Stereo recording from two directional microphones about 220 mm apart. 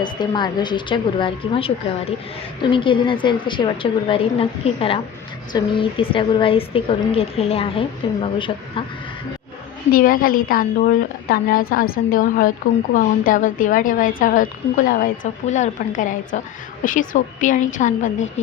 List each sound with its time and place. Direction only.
0.0 s a woman's voice: 20° left (ahead or behind)
9.9 s a woman's voice: 40° left (ahead or behind)